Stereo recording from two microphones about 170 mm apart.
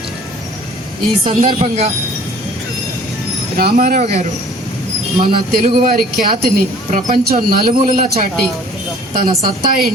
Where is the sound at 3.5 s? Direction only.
70° right (ahead or behind).